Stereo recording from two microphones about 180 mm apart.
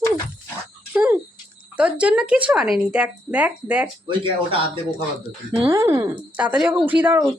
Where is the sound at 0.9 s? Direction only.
10° right (ahead or behind).